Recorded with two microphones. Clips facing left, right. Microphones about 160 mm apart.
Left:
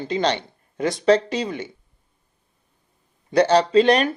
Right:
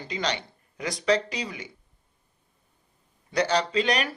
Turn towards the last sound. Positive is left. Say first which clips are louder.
# left 9 dB
turn(degrees=30)  # may be behind; listen again after turning